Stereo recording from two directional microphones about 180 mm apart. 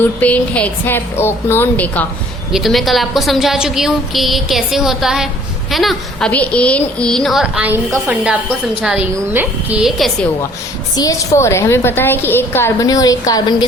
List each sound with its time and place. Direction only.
0.0 s a woman's voice: 10° left (ahead or behind)
2.5 s a woman's voice: centre (ahead or behind)
10.9 s a woman's voice: 20° left (ahead or behind)